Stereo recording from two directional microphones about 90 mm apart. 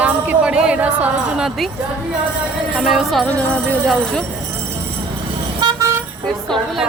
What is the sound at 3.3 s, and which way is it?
Music, 10° left (ahead or behind).